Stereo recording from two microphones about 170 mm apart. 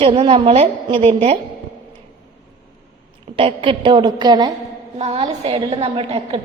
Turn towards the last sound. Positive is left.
turn(degrees=-35)  # may be behind; listen again after turning